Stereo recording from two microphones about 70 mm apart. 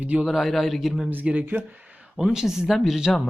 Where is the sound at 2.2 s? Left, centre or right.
Centre.